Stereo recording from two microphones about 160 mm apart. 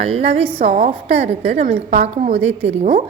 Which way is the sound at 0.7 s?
60° right (ahead or behind).